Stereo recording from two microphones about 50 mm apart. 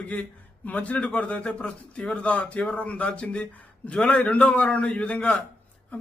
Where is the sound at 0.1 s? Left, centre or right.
Left.